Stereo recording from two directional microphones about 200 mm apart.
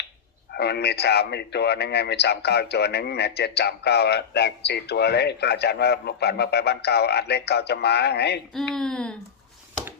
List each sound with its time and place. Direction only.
0.5 s a man's voice: 55° left (ahead or behind)
8.7 s speech: 5° left (ahead or behind)